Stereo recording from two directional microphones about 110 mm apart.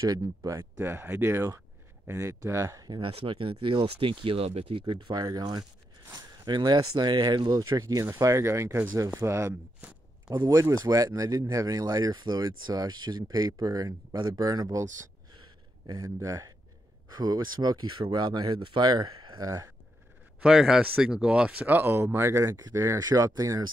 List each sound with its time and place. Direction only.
0.0 s speech: 30° right (ahead or behind)
2.9 s speech: 55° right (ahead or behind); by 9.6 s 25° right (ahead or behind)
9.8 s a sound: 10° right (ahead or behind)
10.3 s speech: 30° right (ahead or behind)
15.3 s a sound: 45° right (ahead or behind)
16.0 s speech: 30° right (ahead or behind)
20.3 s speech: 5° right (ahead or behind); by 23.7 s 35° right (ahead or behind)